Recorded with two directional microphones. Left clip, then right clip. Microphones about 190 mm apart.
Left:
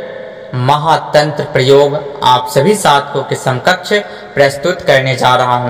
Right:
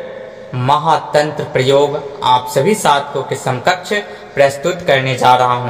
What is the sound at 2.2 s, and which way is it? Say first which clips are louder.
Speech: left 3 dB; 35° left (ahead or behind).